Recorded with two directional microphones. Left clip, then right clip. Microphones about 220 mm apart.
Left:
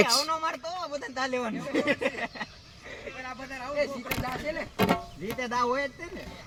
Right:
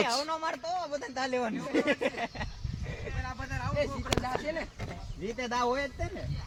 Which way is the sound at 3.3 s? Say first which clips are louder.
Right 1 dB; 40° right (ahead or behind).